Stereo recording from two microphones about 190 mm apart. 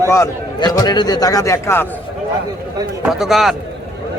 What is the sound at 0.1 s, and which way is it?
A man's voice, 15° left (ahead or behind).